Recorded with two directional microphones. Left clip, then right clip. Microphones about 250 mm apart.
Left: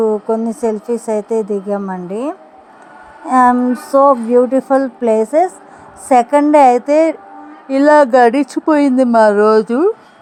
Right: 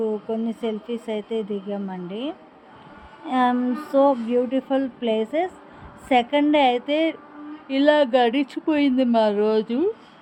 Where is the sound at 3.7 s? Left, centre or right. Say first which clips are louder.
Left 9 dB; left.